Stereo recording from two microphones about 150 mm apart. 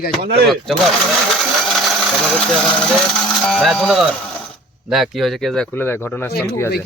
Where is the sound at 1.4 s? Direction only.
Centre (ahead or behind).